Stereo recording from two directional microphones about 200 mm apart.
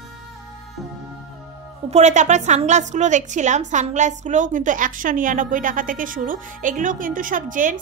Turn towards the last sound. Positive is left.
turn(degrees=-40)  # may be behind; listen again after turning